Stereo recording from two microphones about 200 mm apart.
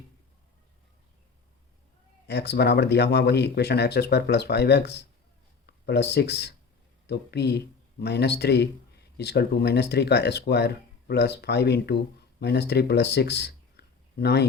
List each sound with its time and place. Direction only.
2.2 s speech: 55° left (ahead or behind)